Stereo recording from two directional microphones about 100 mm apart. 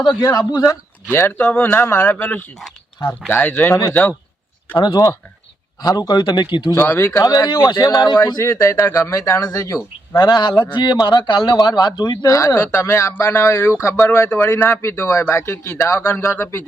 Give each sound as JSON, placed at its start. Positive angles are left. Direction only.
{"t": 0.2, "sound": "speech", "side_deg": 40}
{"t": 1.1, "sound": "speech", "side_deg": 25}
{"t": 4.8, "sound": "speech", "side_deg": 40}
{"t": 6.7, "sound": "speech", "side_deg": 30}
{"t": 8.2, "sound": "speech", "side_deg": 35}
{"t": 10.5, "sound": "speech", "side_deg": 20}
{"t": 10.8, "sound": "speech", "side_deg": 50}
{"t": 12.3, "sound": "speech", "side_deg": 30}